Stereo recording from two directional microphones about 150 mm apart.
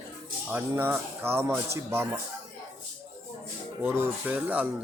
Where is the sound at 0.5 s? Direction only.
15° right (ahead or behind).